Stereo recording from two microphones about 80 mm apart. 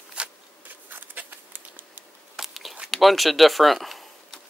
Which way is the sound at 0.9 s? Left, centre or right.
Right.